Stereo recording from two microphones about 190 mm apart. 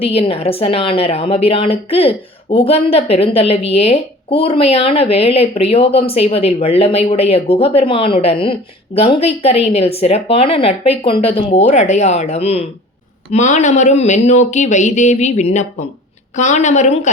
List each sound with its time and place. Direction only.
0.0 s a woman's voice: 30° left (ahead or behind)